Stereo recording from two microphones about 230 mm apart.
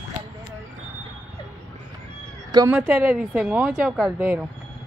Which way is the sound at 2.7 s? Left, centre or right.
Centre.